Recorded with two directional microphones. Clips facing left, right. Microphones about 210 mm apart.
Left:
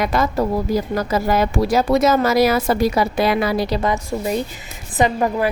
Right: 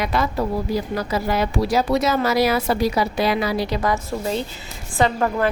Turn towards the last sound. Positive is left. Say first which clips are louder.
# left 2 dB
turn(degrees=15)  # may be behind; listen again after turning